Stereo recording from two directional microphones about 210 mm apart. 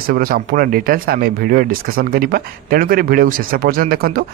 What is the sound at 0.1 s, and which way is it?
Speech, 45° right (ahead or behind).